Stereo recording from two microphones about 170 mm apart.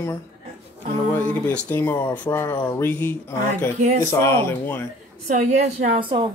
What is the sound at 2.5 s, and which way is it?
Speech, 25° left (ahead or behind).